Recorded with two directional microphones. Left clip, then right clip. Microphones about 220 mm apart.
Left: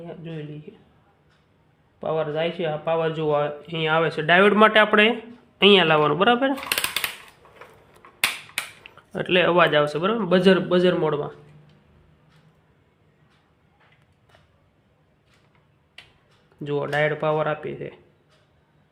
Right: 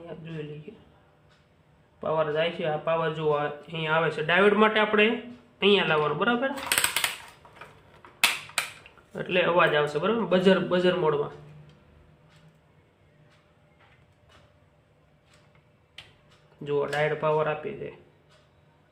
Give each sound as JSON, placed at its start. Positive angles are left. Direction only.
{"t": 2.0, "sound": "speech", "side_deg": 35}
{"t": 9.1, "sound": "speech", "side_deg": 50}
{"t": 16.6, "sound": "speech", "side_deg": 40}